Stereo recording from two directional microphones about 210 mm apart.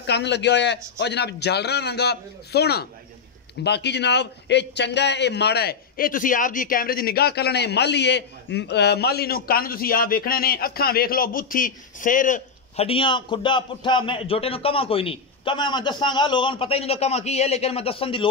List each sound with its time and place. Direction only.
0.0 s a man's voice: 55° left (ahead or behind); by 18.3 s 25° left (ahead or behind)